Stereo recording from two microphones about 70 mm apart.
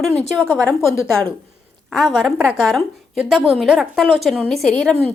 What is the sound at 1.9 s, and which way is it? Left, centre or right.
A woman's voice, centre.